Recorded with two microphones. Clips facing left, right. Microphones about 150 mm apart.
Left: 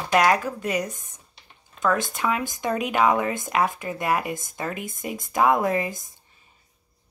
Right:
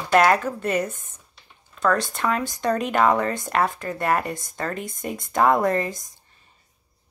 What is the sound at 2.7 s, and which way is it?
Speech, 5° left (ahead or behind).